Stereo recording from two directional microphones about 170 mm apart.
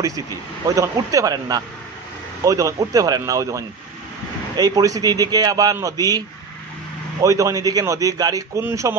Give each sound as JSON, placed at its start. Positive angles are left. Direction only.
{"t": 0.7, "sound": "a man's voice", "side_deg": -20}